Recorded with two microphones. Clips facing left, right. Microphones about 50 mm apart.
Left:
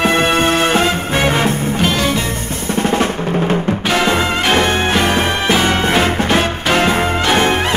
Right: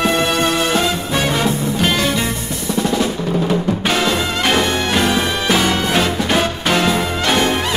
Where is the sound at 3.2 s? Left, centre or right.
Left.